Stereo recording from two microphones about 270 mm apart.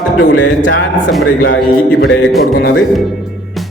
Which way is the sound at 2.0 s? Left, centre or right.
Left.